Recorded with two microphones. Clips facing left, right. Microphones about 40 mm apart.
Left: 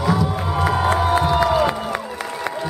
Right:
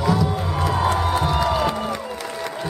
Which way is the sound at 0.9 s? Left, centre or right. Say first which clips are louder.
Left 3 dB; centre.